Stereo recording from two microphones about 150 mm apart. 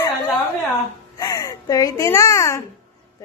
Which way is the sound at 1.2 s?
25° left (ahead or behind).